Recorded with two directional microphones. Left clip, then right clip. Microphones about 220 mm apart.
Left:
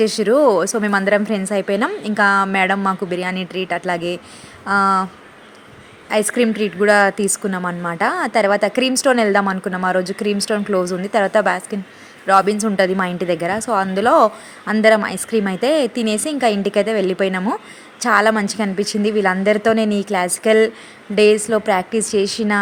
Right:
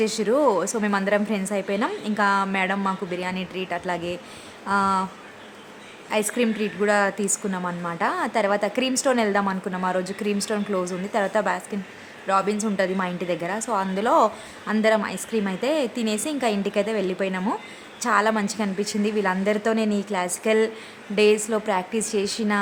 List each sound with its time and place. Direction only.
0.0 s a woman's voice: 20° left (ahead or behind)
6.1 s a woman's voice: 20° left (ahead or behind)